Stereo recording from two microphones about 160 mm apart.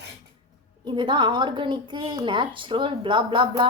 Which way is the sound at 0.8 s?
30° right (ahead or behind).